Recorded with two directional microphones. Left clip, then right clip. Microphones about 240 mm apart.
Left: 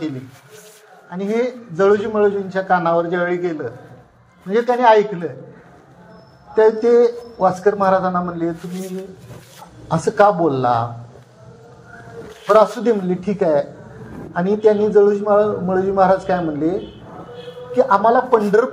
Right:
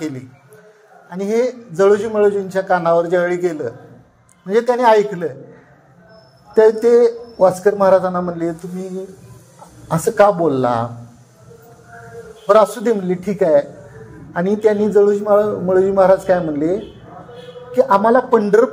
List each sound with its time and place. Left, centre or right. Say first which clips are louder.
1.1 s a man's voice: right 3 dB; right
6.5 s a man's voice: right 2 dB; right
9.8 s a man's voice: right 1 dB; right
12.4 s a man's voice: right 1 dB; right
17.7 s a man's voice: right 1 dB; right